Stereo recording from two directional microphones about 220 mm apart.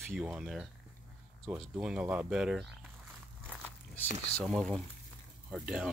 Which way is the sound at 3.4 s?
5° left (ahead or behind).